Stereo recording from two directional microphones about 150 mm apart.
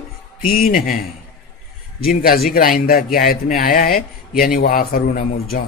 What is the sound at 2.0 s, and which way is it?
A man's voice, 80° left.